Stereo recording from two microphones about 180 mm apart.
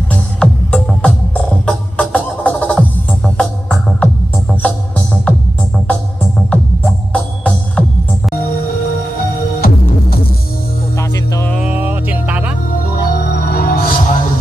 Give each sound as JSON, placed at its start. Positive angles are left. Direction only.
{"t": 0.1, "sound": "music", "side_deg": 5}
{"t": 6.5, "sound": "music", "side_deg": 5}
{"t": 11.0, "sound": "music", "side_deg": 15}
{"t": 11.5, "sound": "music", "side_deg": -5}
{"t": 13.1, "sound": "music", "side_deg": 65}